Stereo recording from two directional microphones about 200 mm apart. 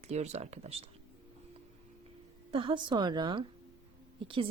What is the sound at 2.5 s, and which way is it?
A woman's voice, 25° right (ahead or behind).